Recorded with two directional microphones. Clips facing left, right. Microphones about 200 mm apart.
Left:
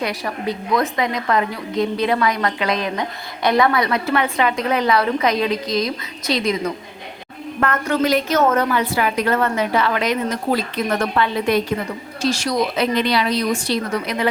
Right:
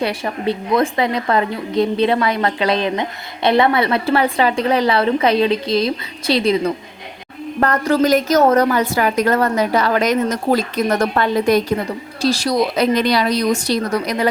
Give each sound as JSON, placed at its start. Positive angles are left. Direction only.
{"t": 0.0, "sound": "a woman's voice", "side_deg": -30}
{"t": 7.6, "sound": "a woman's voice", "side_deg": -35}